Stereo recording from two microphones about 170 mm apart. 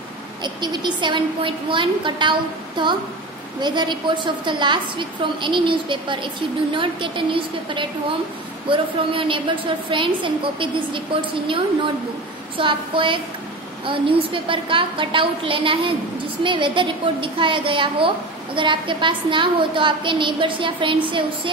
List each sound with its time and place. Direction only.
0.4 s a woman's voice: 25° right (ahead or behind)